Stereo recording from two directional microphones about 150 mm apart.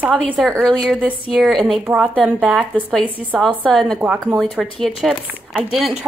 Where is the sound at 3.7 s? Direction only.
Centre (ahead or behind).